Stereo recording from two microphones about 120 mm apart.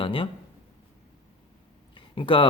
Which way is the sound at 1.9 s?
45° left (ahead or behind).